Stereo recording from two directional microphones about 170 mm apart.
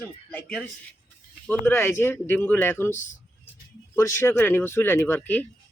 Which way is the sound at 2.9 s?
45° left (ahead or behind).